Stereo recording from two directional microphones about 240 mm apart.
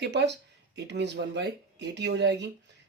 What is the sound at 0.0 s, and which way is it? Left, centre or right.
Speech, right.